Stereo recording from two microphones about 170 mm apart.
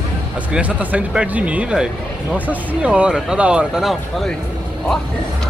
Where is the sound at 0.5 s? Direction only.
10° right (ahead or behind).